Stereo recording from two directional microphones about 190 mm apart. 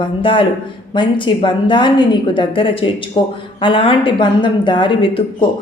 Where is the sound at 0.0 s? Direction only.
25° left (ahead or behind).